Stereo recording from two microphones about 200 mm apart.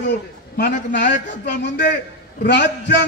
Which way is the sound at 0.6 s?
40° left (ahead or behind).